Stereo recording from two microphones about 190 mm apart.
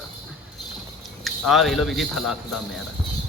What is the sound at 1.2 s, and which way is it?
A man's voice, centre (ahead or behind).